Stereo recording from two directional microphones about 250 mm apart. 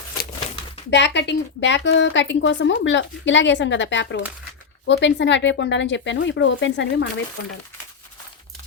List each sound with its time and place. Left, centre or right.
0.9 s a woman's voice: left